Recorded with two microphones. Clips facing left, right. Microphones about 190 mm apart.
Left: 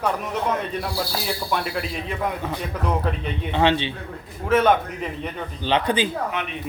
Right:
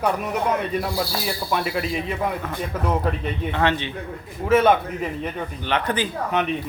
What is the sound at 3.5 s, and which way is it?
Speech, 25° left (ahead or behind).